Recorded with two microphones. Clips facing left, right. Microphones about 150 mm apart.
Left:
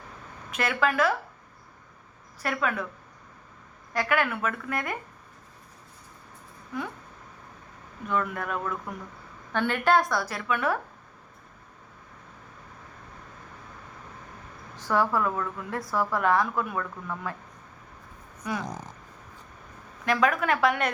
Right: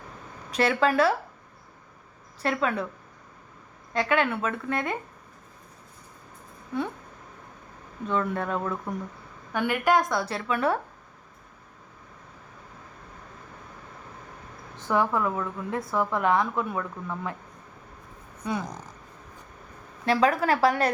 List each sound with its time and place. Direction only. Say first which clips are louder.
0.5 s a woman's voice: right 4 dB; 30° right (ahead or behind)
2.4 s a woman's voice: right 2 dB; 25° right (ahead or behind)
3.9 s a woman's voice: right 2 dB; 25° right (ahead or behind)
8.0 s a woman's voice: right 2 dB; 30° right (ahead or behind)
9.5 s a woman's voice: even; 10° right (ahead or behind); by 10.8 s 30° right (ahead or behind)
14.8 s a woman's voice: even; 20° right (ahead or behind)
18.4 s a woman's voice: right 2 dB; 25° right (ahead or behind)
20.1 s a woman's voice: right 2 dB; 30° right (ahead or behind)